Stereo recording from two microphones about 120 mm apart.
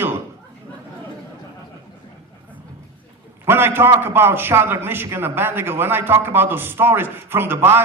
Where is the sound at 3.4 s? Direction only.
20° right (ahead or behind).